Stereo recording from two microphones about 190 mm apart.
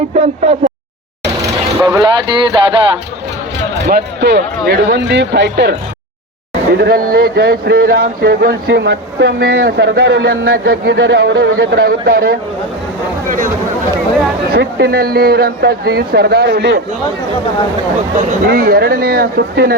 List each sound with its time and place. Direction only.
0.1 s speech: 35° right (ahead or behind)
1.8 s speech: 20° right (ahead or behind)
3.8 s speech: 60° right (ahead or behind)
6.7 s speech: 55° right (ahead or behind)
13.2 s a sound: 45° right (ahead or behind)
14.5 s speech: 55° right (ahead or behind)
18.4 s speech: 50° right (ahead or behind)